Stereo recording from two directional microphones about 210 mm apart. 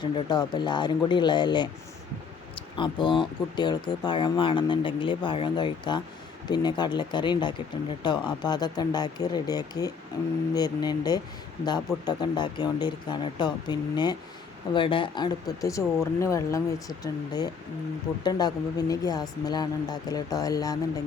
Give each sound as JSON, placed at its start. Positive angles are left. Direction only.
{"t": 0.0, "sound": "speech", "side_deg": 20}